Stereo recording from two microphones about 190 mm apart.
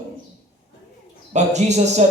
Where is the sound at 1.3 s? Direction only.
35° right (ahead or behind).